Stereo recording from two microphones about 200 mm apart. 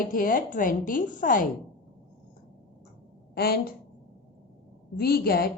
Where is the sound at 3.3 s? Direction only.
50° left (ahead or behind).